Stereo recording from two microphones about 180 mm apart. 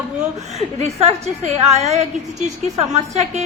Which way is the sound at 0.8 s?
35° right (ahead or behind).